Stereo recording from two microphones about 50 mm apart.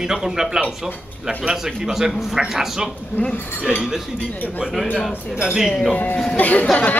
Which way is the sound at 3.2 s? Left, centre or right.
Left.